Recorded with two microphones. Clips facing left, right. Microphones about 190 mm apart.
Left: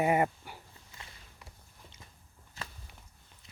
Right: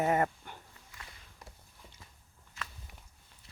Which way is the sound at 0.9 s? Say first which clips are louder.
Left 1 dB; 25° left (ahead or behind).